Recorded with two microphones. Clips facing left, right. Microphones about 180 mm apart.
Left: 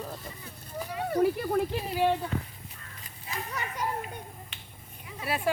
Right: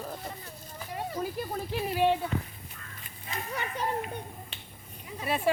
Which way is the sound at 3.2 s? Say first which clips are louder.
Right 1 dB; 30° right (ahead or behind).